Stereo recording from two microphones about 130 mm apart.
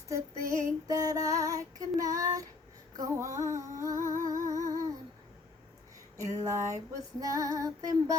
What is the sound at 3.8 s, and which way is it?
Music, 20° right (ahead or behind).